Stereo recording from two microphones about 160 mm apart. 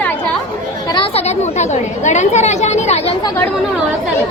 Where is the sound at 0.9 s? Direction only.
40° left (ahead or behind).